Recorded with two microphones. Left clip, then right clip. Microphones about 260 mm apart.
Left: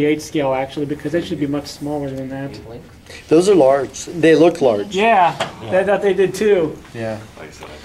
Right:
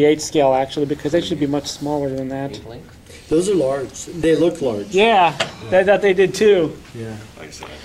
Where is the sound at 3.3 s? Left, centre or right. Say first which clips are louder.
Left 6 dB; centre.